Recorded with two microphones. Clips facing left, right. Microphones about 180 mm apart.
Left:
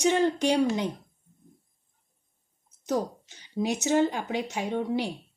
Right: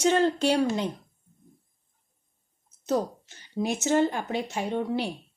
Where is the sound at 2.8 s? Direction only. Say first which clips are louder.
Right 2 dB; 15° left (ahead or behind).